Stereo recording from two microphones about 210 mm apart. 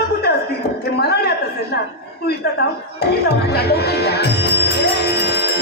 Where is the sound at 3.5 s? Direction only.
50° left (ahead or behind).